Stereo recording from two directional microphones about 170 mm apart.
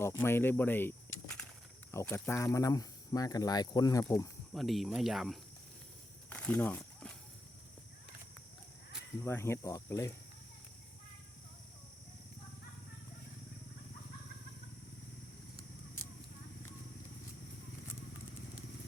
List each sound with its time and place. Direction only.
0.0 s a sound: 15° left (ahead or behind)
1.9 s speech: 15° left (ahead or behind)
4.5 s speech: centre (ahead or behind)
6.3 s walk: 10° left (ahead or behind)
9.2 s speech: 15° left (ahead or behind)